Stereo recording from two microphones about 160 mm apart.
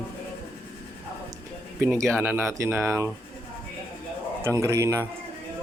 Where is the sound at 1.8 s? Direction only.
15° right (ahead or behind).